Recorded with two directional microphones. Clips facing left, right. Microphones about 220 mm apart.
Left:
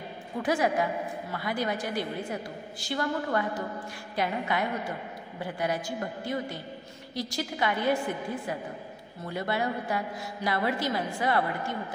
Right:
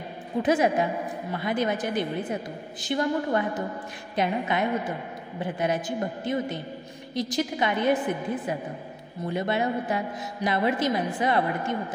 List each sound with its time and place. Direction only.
0.4 s a woman's voice: 20° right (ahead or behind)